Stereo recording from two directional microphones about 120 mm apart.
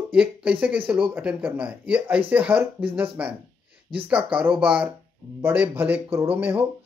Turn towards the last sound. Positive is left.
turn(degrees=-15)  # may be behind; listen again after turning